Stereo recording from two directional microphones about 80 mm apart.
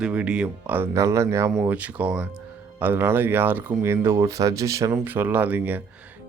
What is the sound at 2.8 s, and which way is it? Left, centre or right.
Speech, right.